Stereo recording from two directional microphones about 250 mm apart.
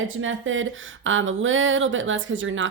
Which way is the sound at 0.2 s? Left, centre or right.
Right.